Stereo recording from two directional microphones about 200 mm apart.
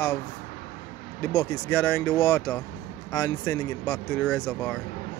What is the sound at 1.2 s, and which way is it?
Speech, 10° left (ahead or behind).